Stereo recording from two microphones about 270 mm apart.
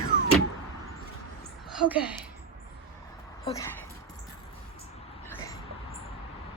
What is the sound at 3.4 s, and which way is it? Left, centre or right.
Speech, centre.